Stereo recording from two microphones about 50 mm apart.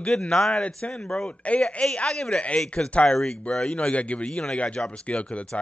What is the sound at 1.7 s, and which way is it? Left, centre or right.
Speech, left.